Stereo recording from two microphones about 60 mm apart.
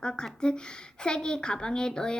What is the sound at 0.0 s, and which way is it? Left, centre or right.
A woman's voice, centre.